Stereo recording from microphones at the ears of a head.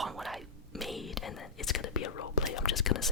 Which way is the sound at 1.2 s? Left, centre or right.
Left.